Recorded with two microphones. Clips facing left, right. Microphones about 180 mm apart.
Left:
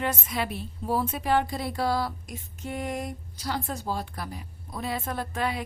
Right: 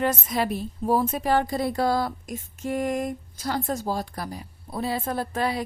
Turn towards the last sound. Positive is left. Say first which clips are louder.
# right 4 dB
turn(degrees=-35)  # may be behind; listen again after turning